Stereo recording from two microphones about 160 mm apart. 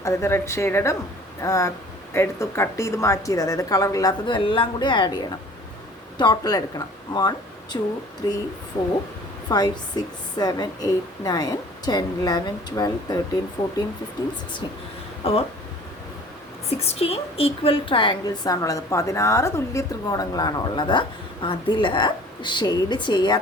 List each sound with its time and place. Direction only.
0.0 s a woman's voice: 15° left (ahead or behind)
9.5 s a woman's voice: 25° left (ahead or behind)
15.2 s speech: 40° left (ahead or behind)
16.6 s a woman's voice: 40° left (ahead or behind)